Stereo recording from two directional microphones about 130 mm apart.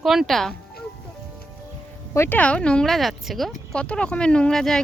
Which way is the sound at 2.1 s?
15° left (ahead or behind).